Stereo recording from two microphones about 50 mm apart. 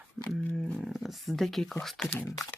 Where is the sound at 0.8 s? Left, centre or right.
Centre.